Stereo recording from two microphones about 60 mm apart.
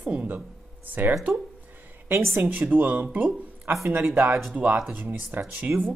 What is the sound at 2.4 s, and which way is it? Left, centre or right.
Speech, right.